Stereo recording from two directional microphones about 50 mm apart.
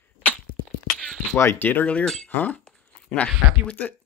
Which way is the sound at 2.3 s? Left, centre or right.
Left.